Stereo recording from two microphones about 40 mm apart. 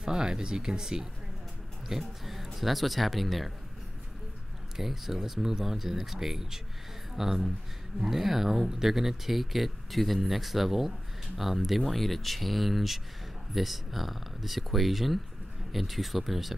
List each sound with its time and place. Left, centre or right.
0.0 s speech: centre
4.7 s speech: centre